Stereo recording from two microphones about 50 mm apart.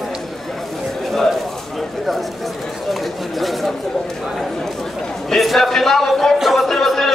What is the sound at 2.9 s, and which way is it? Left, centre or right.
Chatter, centre.